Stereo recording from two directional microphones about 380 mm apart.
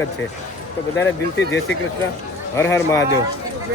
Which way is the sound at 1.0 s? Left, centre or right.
Left.